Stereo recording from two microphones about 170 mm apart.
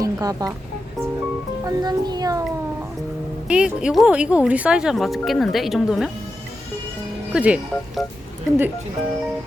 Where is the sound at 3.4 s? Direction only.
5° right (ahead or behind).